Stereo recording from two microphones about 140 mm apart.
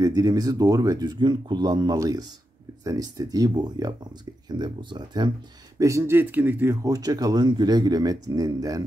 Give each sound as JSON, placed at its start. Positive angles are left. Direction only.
{"t": 0.0, "sound": "speech", "side_deg": -25}
{"t": 5.8, "sound": "speech", "side_deg": -20}